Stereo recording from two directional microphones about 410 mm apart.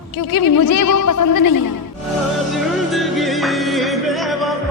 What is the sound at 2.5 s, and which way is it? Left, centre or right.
Music, centre.